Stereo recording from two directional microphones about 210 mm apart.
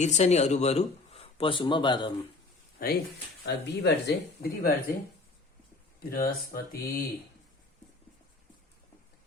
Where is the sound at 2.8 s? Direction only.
45° left (ahead or behind).